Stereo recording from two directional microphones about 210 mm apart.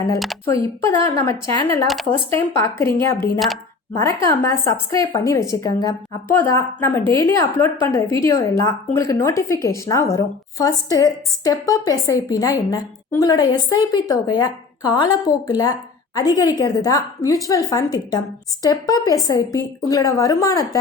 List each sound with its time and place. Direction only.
0.4 s speech: 15° left (ahead or behind)